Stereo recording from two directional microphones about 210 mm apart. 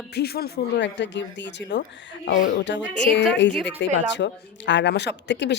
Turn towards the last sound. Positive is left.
turn(degrees=55)  # may be behind; listen again after turning